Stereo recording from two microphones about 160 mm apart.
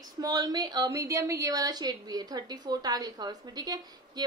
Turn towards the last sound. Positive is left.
turn(degrees=-25)  # may be behind; listen again after turning